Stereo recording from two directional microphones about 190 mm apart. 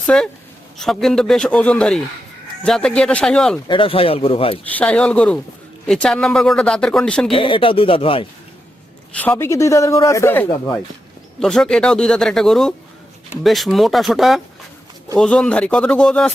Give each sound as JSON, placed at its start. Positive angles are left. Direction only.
{"t": 0.1, "sound": "speech", "side_deg": 5}
{"t": 3.7, "sound": "speech", "side_deg": 30}
{"t": 4.8, "sound": "a man's voice", "side_deg": 5}
{"t": 7.3, "sound": "speech", "side_deg": 25}
{"t": 9.1, "sound": "a man's voice", "side_deg": 10}